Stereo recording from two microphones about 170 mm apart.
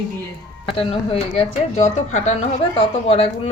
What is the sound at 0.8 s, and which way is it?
Speech, 35° left (ahead or behind).